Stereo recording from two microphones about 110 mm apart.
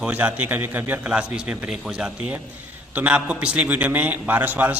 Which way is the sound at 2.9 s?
10° right (ahead or behind).